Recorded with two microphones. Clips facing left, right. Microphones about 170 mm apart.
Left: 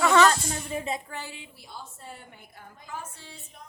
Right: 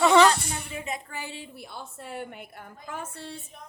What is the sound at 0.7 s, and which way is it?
Speech, 30° left (ahead or behind).